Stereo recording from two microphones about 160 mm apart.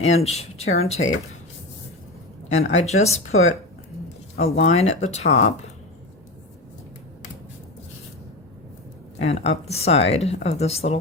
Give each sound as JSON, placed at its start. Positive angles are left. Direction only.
{"t": 0.0, "sound": "speech", "side_deg": 40}
{"t": 2.5, "sound": "speech", "side_deg": 45}
{"t": 4.4, "sound": "speech", "side_deg": 45}
{"t": 9.2, "sound": "speech", "side_deg": 40}